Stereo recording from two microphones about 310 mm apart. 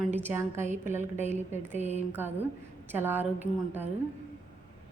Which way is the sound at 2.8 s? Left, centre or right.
Centre.